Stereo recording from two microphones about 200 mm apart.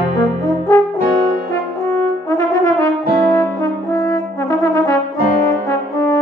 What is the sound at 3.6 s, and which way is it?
French horn, 15° left (ahead or behind).